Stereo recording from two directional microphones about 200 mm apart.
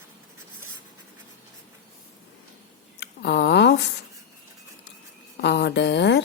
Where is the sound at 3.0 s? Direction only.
60° left (ahead or behind).